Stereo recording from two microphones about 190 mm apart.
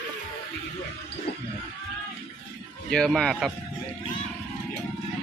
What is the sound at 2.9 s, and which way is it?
Speech, 5° left (ahead or behind).